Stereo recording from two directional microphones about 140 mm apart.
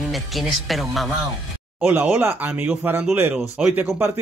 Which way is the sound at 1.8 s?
15° right (ahead or behind).